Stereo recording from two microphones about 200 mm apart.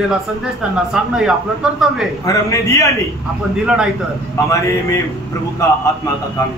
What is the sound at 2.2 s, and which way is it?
Speech, 15° left (ahead or behind).